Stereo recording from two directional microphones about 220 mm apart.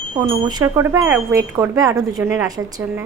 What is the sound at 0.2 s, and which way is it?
A woman's voice, 20° right (ahead or behind).